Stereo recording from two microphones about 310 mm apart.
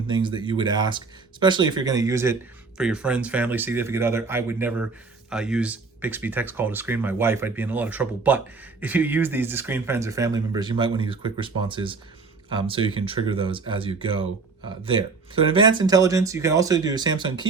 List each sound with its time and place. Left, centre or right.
0.1 s speech: centre